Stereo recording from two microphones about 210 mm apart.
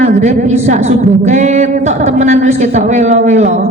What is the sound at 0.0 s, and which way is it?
A woman's voice, 35° right (ahead or behind).